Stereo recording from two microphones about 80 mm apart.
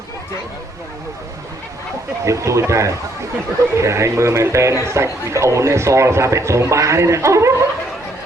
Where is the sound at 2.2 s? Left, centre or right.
Right.